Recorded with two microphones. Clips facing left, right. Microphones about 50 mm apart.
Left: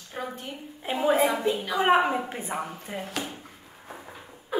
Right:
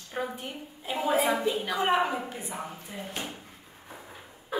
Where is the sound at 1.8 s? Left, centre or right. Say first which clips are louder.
Left 5 dB; left.